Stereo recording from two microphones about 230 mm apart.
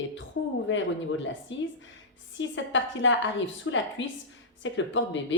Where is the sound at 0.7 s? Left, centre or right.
Left.